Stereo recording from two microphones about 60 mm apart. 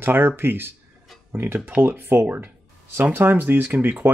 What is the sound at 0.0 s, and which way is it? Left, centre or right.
Speech, right.